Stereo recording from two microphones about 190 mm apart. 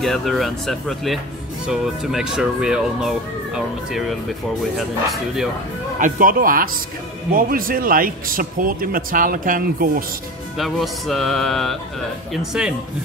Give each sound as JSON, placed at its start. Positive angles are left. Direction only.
{"t": 0.0, "sound": "speech", "side_deg": 0}
{"t": 5.9, "sound": "a man's voice", "side_deg": -45}
{"t": 10.6, "sound": "speech", "side_deg": 0}